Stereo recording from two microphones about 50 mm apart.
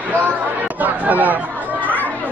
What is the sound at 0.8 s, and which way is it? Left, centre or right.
Chatter, right.